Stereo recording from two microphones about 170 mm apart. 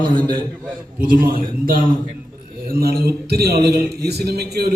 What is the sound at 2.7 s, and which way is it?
Speech, 65° right (ahead or behind).